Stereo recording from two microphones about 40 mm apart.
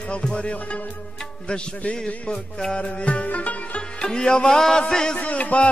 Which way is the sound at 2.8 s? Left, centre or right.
Left.